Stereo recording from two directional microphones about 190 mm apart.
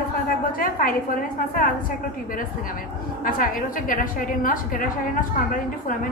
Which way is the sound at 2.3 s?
45° left (ahead or behind).